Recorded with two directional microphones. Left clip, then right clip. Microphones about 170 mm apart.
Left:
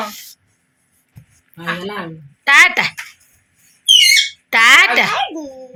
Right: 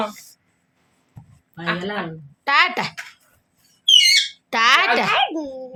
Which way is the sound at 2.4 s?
Centre (ahead or behind).